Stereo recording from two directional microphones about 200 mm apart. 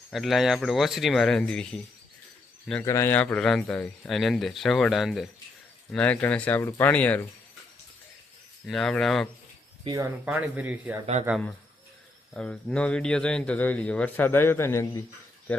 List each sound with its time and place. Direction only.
0.1 s speech: centre (ahead or behind)
8.6 s speech: 5° left (ahead or behind)
9.8 s speech: 20° right (ahead or behind)
10.2 s speech: 10° right (ahead or behind)
12.3 s speech: 5° left (ahead or behind)